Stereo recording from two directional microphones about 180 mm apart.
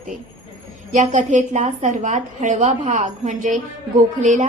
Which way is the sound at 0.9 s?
40° right (ahead or behind).